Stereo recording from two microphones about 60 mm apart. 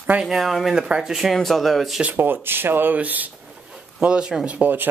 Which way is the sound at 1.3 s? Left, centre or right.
Centre.